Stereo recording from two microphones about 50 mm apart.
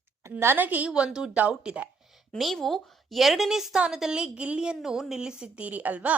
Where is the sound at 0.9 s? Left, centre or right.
Centre.